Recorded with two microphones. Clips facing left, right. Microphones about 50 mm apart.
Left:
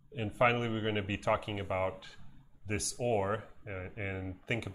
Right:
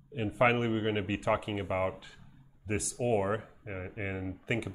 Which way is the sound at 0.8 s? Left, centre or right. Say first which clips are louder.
Right 3 dB; centre.